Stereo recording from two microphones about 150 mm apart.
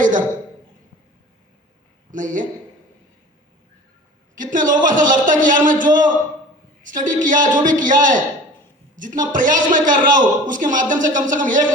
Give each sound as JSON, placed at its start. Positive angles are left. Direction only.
{"t": 0.0, "sound": "a sound", "side_deg": -60}
{"t": 2.0, "sound": "speech", "side_deg": -60}
{"t": 4.4, "sound": "speech", "side_deg": -60}